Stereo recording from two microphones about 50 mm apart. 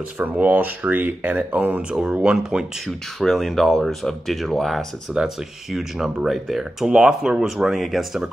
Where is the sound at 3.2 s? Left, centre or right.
Centre.